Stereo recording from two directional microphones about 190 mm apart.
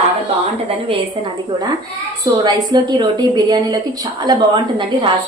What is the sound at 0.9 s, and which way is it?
A woman's voice, 25° right (ahead or behind).